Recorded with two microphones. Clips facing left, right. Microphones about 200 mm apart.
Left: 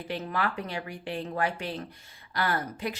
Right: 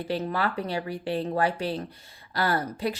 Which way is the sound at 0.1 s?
35° right (ahead or behind).